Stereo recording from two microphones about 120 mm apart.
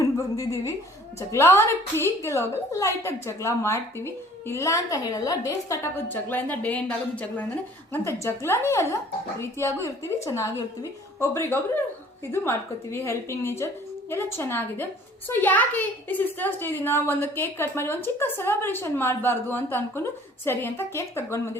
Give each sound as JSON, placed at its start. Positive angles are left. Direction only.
{"t": 0.0, "sound": "a woman's voice", "side_deg": 25}